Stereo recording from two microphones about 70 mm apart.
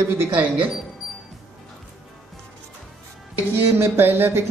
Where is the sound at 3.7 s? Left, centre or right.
Right.